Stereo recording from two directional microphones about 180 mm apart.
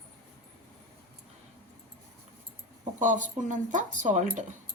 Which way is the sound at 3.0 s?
45° right (ahead or behind).